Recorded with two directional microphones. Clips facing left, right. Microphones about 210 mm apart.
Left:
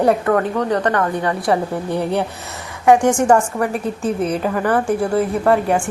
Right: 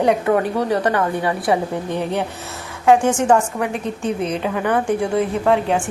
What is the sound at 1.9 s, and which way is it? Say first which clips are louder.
A woman's voice: left 2 dB; 10° left (ahead or behind).